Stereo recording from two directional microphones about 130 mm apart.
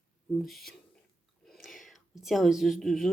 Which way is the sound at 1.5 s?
Centre (ahead or behind).